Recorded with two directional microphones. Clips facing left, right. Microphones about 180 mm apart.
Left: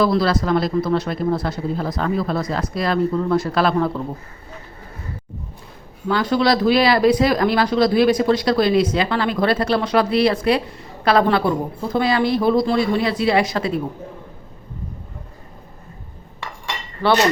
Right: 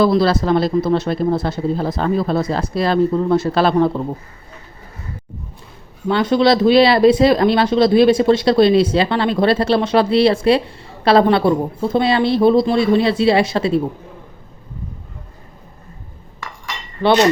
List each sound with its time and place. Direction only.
0.0 s speech: 25° right (ahead or behind)
6.1 s speech: 25° right (ahead or behind)